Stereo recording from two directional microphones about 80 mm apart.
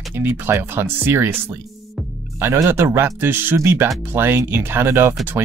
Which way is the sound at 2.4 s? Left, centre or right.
Right.